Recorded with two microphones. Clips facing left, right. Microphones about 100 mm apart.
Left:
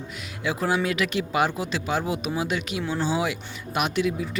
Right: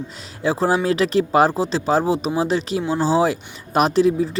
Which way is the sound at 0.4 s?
35° right (ahead or behind).